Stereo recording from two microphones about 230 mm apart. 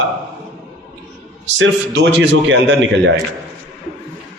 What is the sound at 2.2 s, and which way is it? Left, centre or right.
Speech, right.